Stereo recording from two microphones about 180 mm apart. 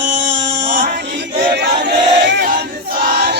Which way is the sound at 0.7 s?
70° right (ahead or behind).